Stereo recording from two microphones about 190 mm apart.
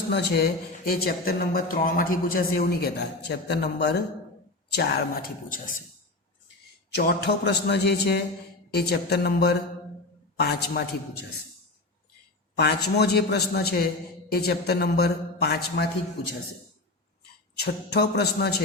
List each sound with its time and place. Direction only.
0.1 s a woman's voice: 60° left (ahead or behind)
6.9 s speech: 60° left (ahead or behind)
12.5 s speech: 60° left (ahead or behind)
17.6 s speech: 60° left (ahead or behind)